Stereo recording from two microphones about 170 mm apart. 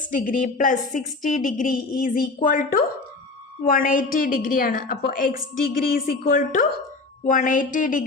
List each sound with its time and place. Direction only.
0.2 s a woman's voice: 50° left (ahead or behind)